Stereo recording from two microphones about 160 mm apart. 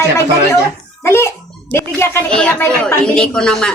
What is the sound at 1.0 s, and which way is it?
Speech, 15° left (ahead or behind).